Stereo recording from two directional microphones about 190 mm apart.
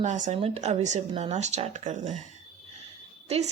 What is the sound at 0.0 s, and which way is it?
Speech, 40° right (ahead or behind).